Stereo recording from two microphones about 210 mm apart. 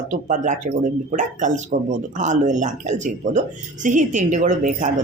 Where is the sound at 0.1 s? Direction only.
35° right (ahead or behind).